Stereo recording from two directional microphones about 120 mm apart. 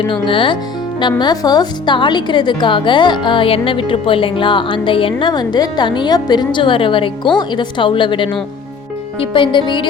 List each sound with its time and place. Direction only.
0.0 s speech: 45° left (ahead or behind)